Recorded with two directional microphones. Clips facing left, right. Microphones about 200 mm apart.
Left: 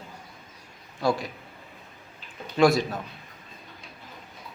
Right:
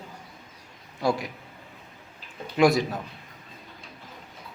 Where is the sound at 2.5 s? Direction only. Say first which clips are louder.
Even; 20° right (ahead or behind).